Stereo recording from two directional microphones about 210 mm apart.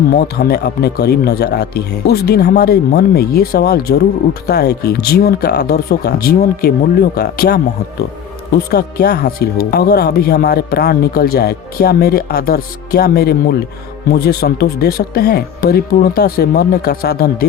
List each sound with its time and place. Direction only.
0.1 s speech: 50° left (ahead or behind)